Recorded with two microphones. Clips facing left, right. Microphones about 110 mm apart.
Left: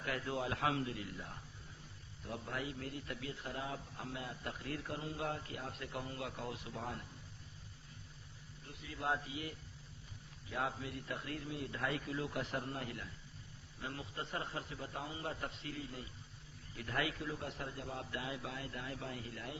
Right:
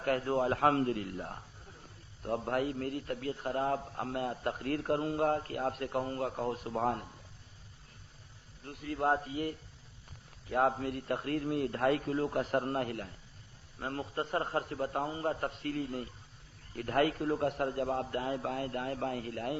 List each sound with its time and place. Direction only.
0.0 s a man's voice: 45° right (ahead or behind)
8.6 s a man's voice: 55° right (ahead or behind)